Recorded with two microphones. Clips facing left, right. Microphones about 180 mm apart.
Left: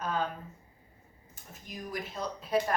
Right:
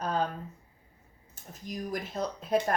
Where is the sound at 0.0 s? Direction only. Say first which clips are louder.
Right 2 dB; 40° right (ahead or behind).